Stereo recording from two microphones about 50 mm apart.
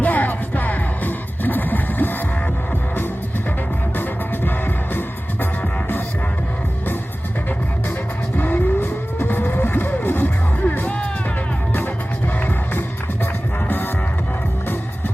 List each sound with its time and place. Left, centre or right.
0.0 s music: left
4.4 s music: left
8.4 s vehicle: left
9.1 s music: left
13.7 s music: left